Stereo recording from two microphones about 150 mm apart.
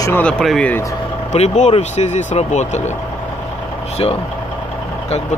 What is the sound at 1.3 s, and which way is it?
Speech, 50° left (ahead or behind).